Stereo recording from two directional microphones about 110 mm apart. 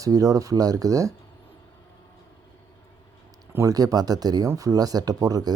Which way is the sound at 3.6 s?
35° right (ahead or behind).